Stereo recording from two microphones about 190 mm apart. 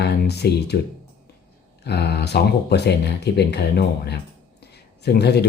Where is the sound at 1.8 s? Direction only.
60° left (ahead or behind).